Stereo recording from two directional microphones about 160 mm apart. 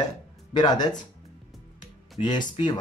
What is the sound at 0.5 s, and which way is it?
Speech, 25° left (ahead or behind).